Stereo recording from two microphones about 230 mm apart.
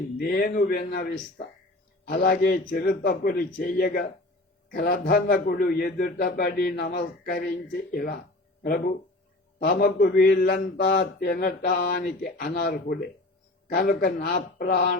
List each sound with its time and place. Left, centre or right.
0.2 s a man's voice: left